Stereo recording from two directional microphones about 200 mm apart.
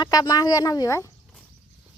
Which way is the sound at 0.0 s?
20° left (ahead or behind).